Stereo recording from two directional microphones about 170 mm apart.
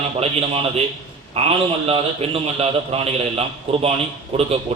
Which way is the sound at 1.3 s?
35° right (ahead or behind).